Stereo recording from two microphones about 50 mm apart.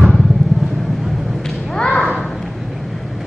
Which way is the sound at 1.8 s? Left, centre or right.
Centre.